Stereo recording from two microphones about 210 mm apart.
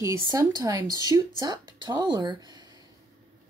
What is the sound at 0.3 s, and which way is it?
A woman's voice, 15° right (ahead or behind).